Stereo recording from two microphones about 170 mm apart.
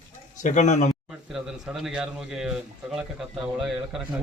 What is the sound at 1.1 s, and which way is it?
Speech, 5° right (ahead or behind).